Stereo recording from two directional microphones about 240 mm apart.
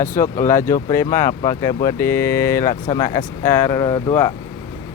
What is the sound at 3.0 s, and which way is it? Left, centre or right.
Speech, centre.